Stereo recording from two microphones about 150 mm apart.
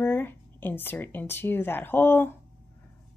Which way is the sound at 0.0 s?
15° left (ahead or behind).